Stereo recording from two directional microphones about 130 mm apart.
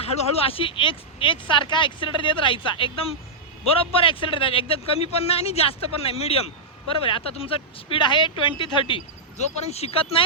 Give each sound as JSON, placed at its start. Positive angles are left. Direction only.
{"t": 0.0, "sound": "speech", "side_deg": 50}
{"t": 9.4, "sound": "speech", "side_deg": 55}